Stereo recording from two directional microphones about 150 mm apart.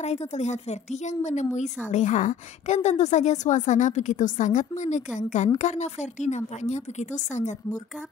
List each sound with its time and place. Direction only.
0.0 s a woman's voice: 45° left (ahead or behind)